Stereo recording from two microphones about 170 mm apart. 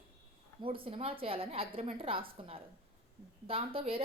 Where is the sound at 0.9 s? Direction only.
35° right (ahead or behind).